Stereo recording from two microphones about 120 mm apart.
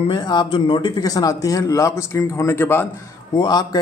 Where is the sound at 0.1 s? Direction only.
40° left (ahead or behind); by 2.9 s 20° left (ahead or behind).